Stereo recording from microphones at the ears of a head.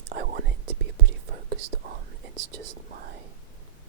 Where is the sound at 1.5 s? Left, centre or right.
Right.